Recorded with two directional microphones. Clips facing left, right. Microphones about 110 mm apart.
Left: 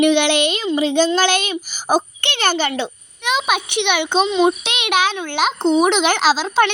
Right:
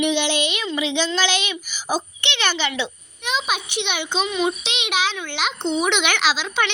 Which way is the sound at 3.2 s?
65° left (ahead or behind).